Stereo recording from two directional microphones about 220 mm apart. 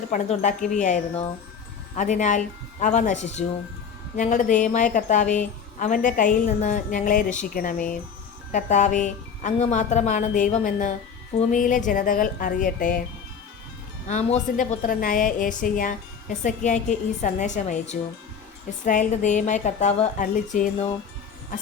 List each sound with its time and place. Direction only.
0.1 s a woman's voice: 35° left (ahead or behind)
14.1 s a woman's voice: 30° left (ahead or behind)